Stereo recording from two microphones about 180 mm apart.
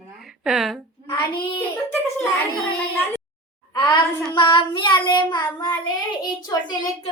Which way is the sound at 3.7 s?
25° left (ahead or behind).